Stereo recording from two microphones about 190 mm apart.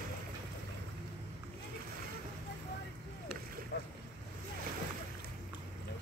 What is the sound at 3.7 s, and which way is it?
Boat, 60° left (ahead or behind).